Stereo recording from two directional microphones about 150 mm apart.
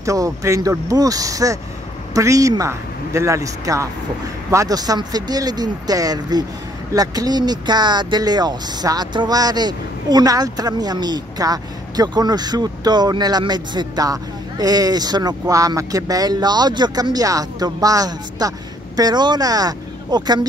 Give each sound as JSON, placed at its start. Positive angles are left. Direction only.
{"t": 0.0, "sound": "speech", "side_deg": -20}